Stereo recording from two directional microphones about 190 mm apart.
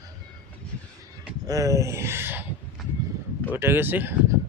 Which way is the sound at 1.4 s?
20° right (ahead or behind).